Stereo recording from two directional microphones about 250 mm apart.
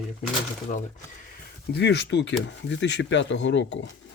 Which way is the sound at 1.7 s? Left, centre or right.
Left.